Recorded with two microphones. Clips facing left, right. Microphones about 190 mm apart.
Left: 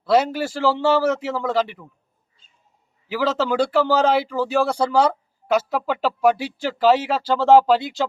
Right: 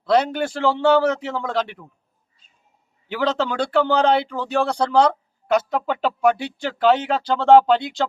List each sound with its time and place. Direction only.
0.0 s speech: 5° left (ahead or behind)
3.1 s speech: 5° left (ahead or behind)